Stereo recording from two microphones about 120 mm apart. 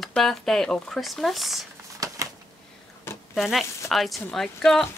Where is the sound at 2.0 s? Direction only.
25° right (ahead or behind).